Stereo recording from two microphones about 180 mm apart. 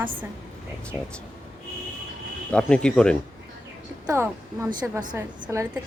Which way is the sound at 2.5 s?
5° left (ahead or behind).